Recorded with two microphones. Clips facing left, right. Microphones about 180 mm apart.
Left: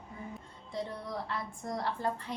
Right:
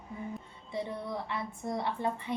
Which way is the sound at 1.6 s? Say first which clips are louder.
Right 1 dB; 5° right (ahead or behind).